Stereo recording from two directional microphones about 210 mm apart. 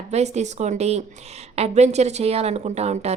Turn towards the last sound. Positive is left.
turn(degrees=-30)  # may be behind; listen again after turning